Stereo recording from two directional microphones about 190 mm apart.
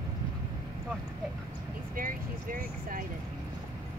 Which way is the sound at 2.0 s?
45° right (ahead or behind).